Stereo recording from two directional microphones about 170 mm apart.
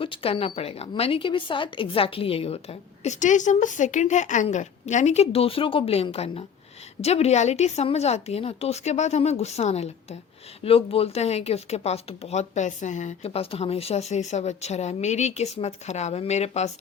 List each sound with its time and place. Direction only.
0.0 s speech: 30° left (ahead or behind)